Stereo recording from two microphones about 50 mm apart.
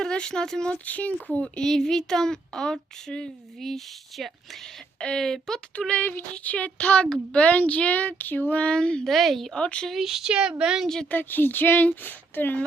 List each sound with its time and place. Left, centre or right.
0.0 s speech: centre
0.7 s speech: left; by 4.3 s centre
4.9 s speech: centre
5.9 s speech: left
8.6 s speech: centre
9.0 s speech: centre
9.6 s speech: left
10.0 s speech: centre
11.1 s speech: left